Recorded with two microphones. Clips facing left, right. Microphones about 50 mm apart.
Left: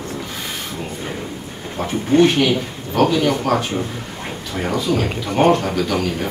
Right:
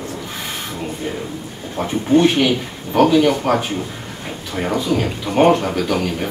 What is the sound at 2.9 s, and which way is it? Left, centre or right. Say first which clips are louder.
Speech: right 3 dB; centre.